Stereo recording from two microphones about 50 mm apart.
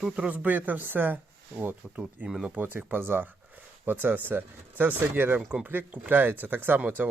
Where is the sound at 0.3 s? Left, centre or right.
Right.